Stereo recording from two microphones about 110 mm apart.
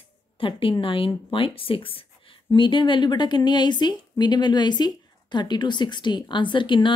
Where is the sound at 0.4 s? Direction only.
50° left (ahead or behind).